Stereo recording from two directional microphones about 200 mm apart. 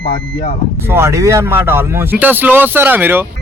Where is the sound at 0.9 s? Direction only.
15° right (ahead or behind).